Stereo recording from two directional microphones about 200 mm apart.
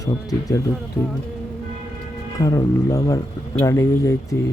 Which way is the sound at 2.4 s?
15° left (ahead or behind).